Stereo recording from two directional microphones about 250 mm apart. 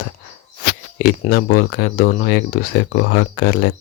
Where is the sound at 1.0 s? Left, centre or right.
Left.